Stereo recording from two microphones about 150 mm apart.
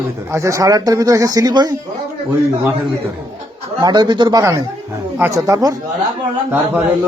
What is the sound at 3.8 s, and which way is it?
Speech, 30° right (ahead or behind).